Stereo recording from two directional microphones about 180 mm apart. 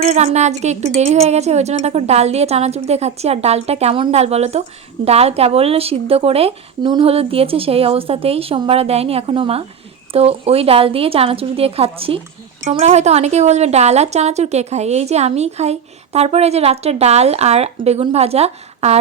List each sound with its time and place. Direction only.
0.0 s speech: 40° right (ahead or behind)